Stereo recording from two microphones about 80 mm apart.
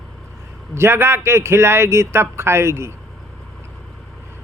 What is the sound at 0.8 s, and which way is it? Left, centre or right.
A man's voice, right.